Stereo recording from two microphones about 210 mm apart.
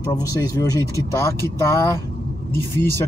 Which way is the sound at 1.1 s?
15° left (ahead or behind).